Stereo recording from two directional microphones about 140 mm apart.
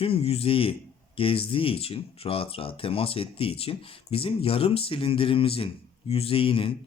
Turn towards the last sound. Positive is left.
turn(degrees=40)  # may be behind; listen again after turning